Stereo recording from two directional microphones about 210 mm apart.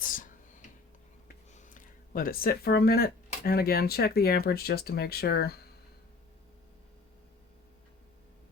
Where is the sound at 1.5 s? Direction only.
40° left (ahead or behind).